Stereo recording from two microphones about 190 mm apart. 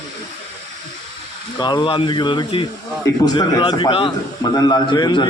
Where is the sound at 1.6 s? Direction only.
25° left (ahead or behind).